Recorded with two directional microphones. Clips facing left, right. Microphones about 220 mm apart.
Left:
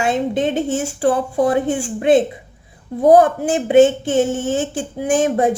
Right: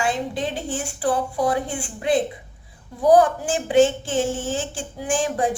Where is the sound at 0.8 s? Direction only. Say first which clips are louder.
Left 5 dB; 45° left (ahead or behind).